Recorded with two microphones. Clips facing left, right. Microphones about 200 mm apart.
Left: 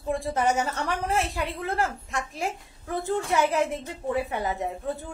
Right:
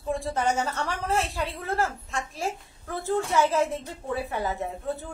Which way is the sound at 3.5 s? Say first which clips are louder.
Even; 15° left (ahead or behind).